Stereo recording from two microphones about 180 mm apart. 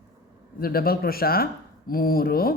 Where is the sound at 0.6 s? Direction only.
55° left (ahead or behind).